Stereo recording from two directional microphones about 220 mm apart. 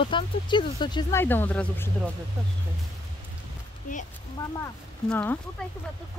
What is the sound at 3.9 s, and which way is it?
Speech, 35° left (ahead or behind).